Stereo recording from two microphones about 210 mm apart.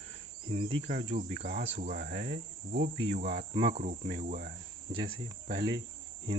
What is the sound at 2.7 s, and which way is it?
Cricket, 35° right (ahead or behind).